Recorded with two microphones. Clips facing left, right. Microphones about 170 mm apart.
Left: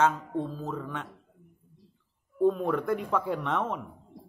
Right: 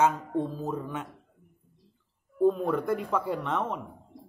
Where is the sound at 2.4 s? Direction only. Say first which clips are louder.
Right 1 dB; centre (ahead or behind).